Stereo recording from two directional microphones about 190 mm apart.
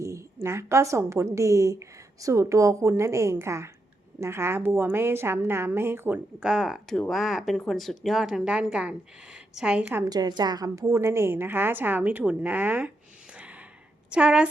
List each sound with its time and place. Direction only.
0.0 s a woman's voice: 15° right (ahead or behind)
10.1 s a woman's voice: 20° right (ahead or behind)
13.3 s gasp: 5° right (ahead or behind)
14.1 s a woman's voice: 5° right (ahead or behind)